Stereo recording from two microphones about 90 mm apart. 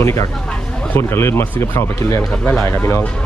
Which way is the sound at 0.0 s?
30° left (ahead or behind).